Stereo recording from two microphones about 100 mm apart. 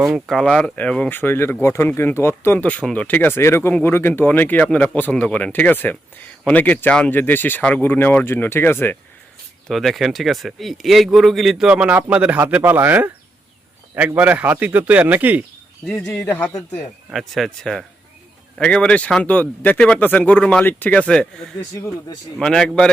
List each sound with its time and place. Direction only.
0.0 s speech: centre (ahead or behind); by 9.0 s 20° left (ahead or behind)
9.6 s speech: centre (ahead or behind); by 13.1 s 20° right (ahead or behind)
14.2 s speech: 15° right (ahead or behind)
15.9 s speech: 10° left (ahead or behind)
21.1 s speech: 5° left (ahead or behind)
21.6 s speech: 35° left (ahead or behind)
22.4 s speech: 5° left (ahead or behind)